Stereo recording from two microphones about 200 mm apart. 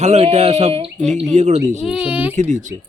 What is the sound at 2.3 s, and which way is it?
Speech, 35° right (ahead or behind).